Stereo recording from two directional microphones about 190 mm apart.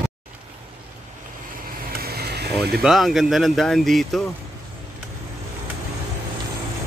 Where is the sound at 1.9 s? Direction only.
55° right (ahead or behind).